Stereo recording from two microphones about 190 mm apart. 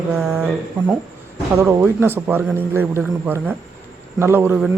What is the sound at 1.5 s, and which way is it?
A man's voice, 10° right (ahead or behind).